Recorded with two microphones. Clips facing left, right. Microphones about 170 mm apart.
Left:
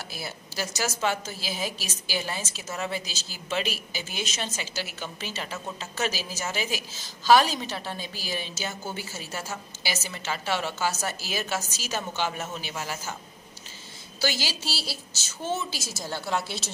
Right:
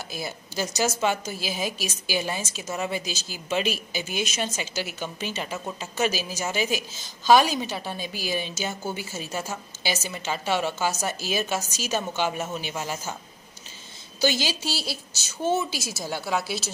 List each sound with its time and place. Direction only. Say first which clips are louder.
0.1 s a woman's voice: right 4 dB; 20° right (ahead or behind)
14.2 s a woman's voice: right 5 dB; 20° right (ahead or behind)